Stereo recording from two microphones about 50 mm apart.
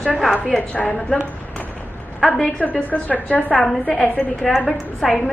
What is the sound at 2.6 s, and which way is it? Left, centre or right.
A woman's voice, left.